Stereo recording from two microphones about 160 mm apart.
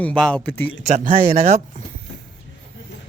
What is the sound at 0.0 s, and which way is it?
Speech, 5° left (ahead or behind).